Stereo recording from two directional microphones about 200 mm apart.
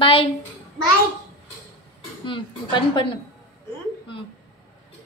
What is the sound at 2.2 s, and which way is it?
Speech, 25° left (ahead or behind).